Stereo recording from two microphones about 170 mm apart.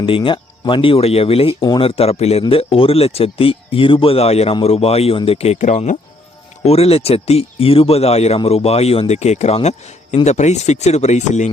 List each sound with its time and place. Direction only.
0.0 s speech: 30° left (ahead or behind)